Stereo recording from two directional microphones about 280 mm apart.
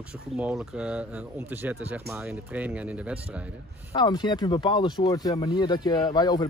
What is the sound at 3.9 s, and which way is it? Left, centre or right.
Speech, centre.